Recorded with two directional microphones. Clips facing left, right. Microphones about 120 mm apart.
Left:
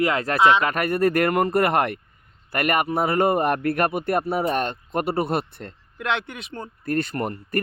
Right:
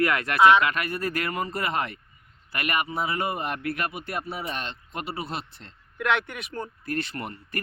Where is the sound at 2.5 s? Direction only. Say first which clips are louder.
Left 6 dB; 50° left (ahead or behind).